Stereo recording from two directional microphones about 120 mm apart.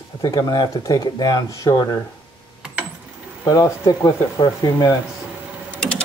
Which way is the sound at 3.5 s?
30° left (ahead or behind).